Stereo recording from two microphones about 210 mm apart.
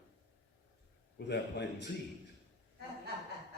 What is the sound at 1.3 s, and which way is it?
Speech, 55° left (ahead or behind).